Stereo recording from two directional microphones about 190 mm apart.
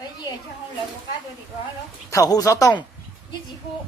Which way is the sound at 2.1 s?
20° left (ahead or behind).